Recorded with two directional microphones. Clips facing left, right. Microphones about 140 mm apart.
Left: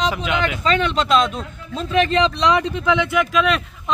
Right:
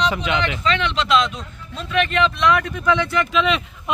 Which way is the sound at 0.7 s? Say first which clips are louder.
Left 2 dB; 40° left (ahead or behind).